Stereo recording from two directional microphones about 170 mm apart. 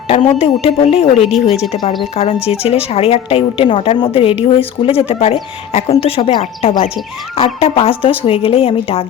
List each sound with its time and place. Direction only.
0.1 s speech: 35° left (ahead or behind)
1.7 s speech: 25° left (ahead or behind)
2.1 s speech: 35° left (ahead or behind)